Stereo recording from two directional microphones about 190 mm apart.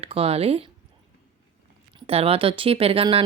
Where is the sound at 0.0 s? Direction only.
30° right (ahead or behind).